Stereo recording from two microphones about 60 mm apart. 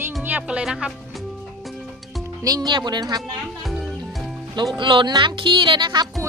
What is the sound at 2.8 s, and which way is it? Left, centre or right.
Speech, right.